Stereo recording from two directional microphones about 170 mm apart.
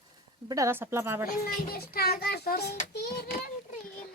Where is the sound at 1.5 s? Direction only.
60° left (ahead or behind).